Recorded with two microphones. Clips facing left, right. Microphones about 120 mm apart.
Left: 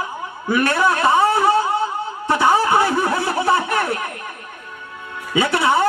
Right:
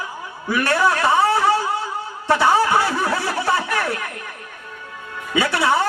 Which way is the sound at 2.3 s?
25° left (ahead or behind).